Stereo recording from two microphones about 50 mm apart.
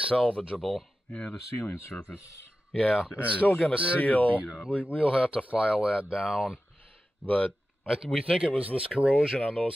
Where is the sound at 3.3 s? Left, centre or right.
Left.